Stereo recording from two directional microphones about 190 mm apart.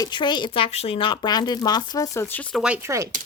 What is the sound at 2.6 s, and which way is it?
Speech, 10° right (ahead or behind).